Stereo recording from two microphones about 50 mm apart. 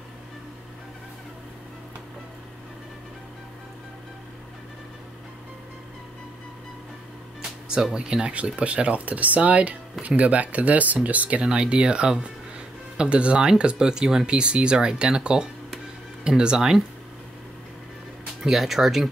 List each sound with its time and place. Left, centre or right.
7.7 s speech: centre
18.4 s speech: centre